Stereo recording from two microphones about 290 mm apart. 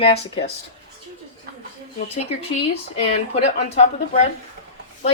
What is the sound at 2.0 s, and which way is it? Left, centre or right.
Speech, left.